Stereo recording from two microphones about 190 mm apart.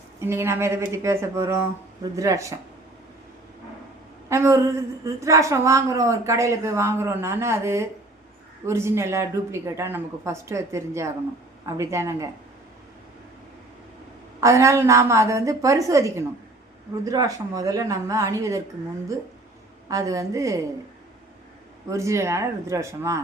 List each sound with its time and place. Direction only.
0.2 s a woman's voice: 15° right (ahead or behind)
4.3 s a woman's voice: 15° right (ahead or behind)
14.4 s a woman's voice: 15° right (ahead or behind)
19.9 s a woman's voice: 15° right (ahead or behind)
21.8 s a woman's voice: 15° right (ahead or behind)